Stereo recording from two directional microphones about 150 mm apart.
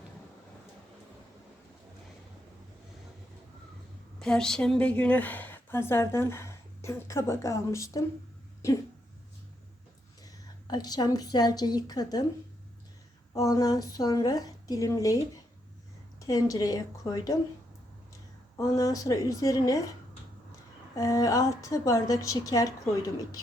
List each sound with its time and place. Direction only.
4.2 s a woman's voice: 5° left (ahead or behind); by 8.0 s 20° left (ahead or behind)
10.7 s a woman's voice: 25° left (ahead or behind)
13.3 s a woman's voice: 25° left (ahead or behind)
16.2 s a woman's voice: 25° left (ahead or behind)
18.5 s a woman's voice: 20° left (ahead or behind)
20.9 s a woman's voice: 20° left (ahead or behind)